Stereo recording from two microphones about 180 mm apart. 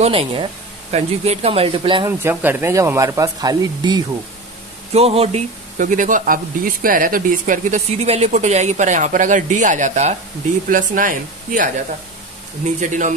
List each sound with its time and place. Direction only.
0.0 s speech: 35° right (ahead or behind)
2.0 s speech: 15° right (ahead or behind)
4.9 s speech: 35° right (ahead or behind)
5.8 s speech: 45° right (ahead or behind)